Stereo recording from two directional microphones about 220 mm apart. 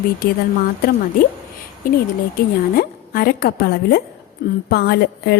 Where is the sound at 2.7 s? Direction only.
45° left (ahead or behind).